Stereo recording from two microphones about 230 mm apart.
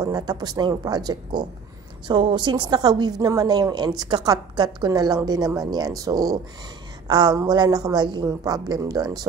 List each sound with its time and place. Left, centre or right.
0.0 s a woman's voice: centre